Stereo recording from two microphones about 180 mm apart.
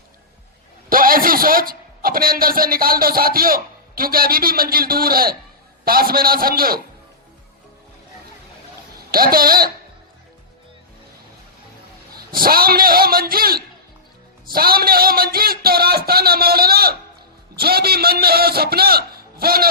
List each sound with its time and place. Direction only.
0.9 s a man's voice: 50° right (ahead or behind)
9.0 s speech: 55° right (ahead or behind)
12.1 s a man's voice: 55° right (ahead or behind)